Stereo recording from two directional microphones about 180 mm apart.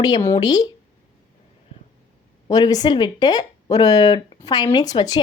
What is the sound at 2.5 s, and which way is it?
Speech, 20° left (ahead or behind).